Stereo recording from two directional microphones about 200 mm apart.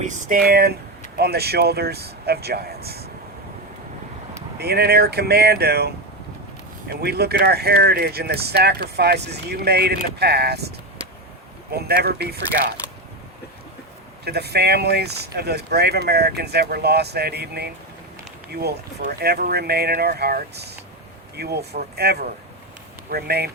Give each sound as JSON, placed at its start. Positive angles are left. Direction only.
{"t": 0.0, "sound": "speech", "side_deg": -40}
{"t": 4.5, "sound": "speech", "side_deg": -55}
{"t": 11.7, "sound": "speech", "side_deg": -55}
{"t": 14.3, "sound": "speech", "side_deg": -55}